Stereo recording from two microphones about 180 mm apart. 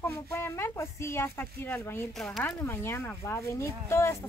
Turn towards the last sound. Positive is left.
turn(degrees=15)  # may be behind; listen again after turning